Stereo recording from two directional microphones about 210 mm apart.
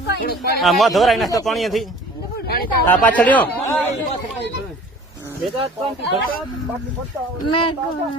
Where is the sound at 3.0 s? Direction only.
5° left (ahead or behind).